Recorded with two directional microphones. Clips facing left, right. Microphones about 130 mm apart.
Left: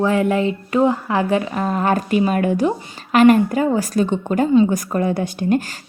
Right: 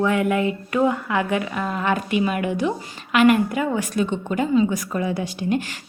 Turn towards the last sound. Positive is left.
turn(degrees=45)  # may be behind; listen again after turning